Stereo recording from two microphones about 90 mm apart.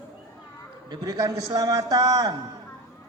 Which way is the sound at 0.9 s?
50° right (ahead or behind).